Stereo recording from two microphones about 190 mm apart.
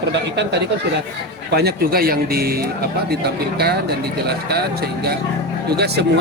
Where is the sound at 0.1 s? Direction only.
65° right (ahead or behind).